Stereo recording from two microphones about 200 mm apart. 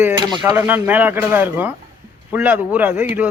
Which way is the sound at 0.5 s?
10° right (ahead or behind).